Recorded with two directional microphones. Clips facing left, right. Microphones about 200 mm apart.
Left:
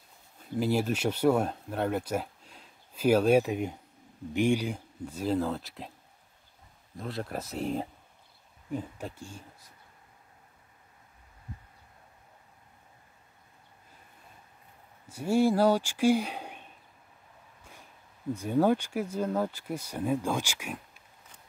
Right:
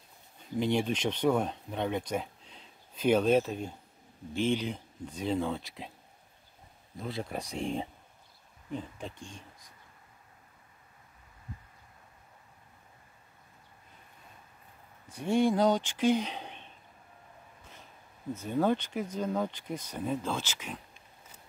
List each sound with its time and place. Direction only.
0.6 s speech: 5° left (ahead or behind)
7.0 s speech: centre (ahead or behind)
15.0 s speech: 5° left (ahead or behind)
18.3 s speech: 10° left (ahead or behind)